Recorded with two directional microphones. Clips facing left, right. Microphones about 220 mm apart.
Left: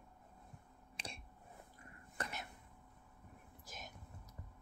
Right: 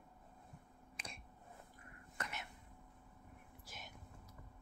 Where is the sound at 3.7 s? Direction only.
45° left (ahead or behind).